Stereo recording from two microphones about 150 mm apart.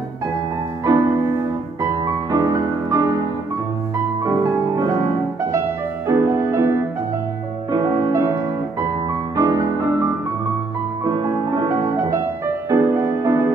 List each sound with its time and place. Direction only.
0.8 s music: 20° right (ahead or behind)
2.3 s music: 25° right (ahead or behind)
6.0 s music: 20° right (ahead or behind)
9.4 s music: 25° right (ahead or behind)